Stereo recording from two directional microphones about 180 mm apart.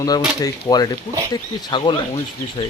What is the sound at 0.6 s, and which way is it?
Speech, 20° left (ahead or behind).